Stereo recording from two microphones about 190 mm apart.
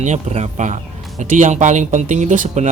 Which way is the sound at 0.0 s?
35° right (ahead or behind).